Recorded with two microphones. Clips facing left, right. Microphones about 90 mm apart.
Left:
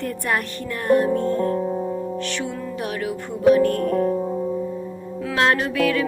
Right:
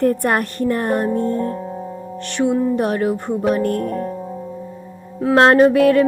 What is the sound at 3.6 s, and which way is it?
Speech, 55° left (ahead or behind).